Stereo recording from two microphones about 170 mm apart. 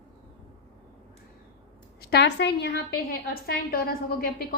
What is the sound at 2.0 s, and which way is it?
A woman's voice, 80° left.